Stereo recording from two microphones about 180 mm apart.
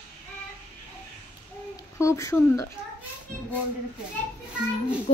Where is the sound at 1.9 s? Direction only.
15° left (ahead or behind).